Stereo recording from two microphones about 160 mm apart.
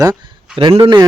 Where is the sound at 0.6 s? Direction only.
30° right (ahead or behind).